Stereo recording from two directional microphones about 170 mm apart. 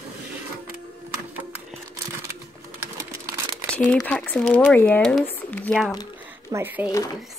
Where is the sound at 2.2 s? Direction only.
15° right (ahead or behind).